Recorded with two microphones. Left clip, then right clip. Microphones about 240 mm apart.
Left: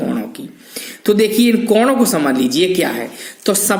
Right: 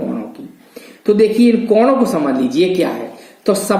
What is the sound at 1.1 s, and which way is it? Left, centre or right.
Speech, left.